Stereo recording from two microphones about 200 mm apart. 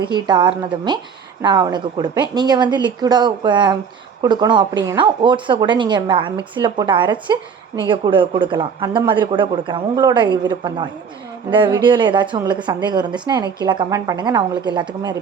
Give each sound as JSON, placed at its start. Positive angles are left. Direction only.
{"t": 0.0, "sound": "a woman's voice", "side_deg": -20}